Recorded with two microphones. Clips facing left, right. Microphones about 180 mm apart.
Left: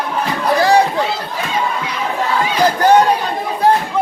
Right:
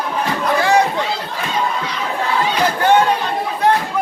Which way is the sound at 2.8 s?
40° left (ahead or behind).